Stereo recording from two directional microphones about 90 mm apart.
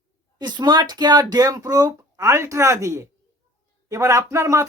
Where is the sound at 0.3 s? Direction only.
50° right (ahead or behind).